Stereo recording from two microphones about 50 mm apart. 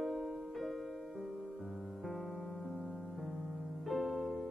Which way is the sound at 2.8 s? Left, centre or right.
Centre.